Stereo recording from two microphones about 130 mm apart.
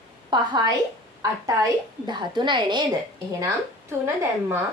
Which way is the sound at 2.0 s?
35° right (ahead or behind).